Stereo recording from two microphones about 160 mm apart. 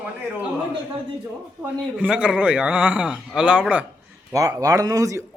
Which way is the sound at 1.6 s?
10° right (ahead or behind).